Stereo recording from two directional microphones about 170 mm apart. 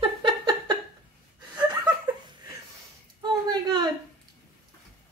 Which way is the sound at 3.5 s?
25° right (ahead or behind).